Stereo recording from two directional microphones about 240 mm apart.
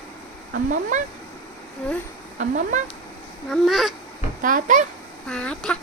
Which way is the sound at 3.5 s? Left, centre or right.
Centre.